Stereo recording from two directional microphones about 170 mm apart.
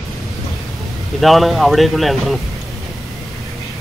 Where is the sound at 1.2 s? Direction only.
Centre (ahead or behind).